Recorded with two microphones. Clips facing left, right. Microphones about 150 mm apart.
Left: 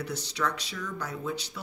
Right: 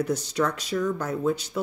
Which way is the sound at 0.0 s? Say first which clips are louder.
Right 7 dB; 45° right (ahead or behind).